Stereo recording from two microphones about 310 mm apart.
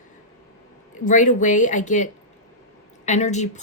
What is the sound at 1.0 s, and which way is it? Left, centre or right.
Speech, left.